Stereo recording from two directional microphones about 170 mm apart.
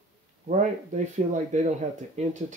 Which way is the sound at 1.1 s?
45° right (ahead or behind).